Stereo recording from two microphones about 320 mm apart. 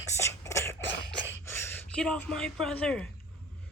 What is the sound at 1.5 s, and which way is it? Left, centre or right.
A woman's voice, centre.